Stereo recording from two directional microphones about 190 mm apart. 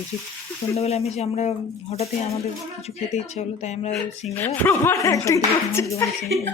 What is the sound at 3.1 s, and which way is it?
A man's voice, 35° left (ahead or behind).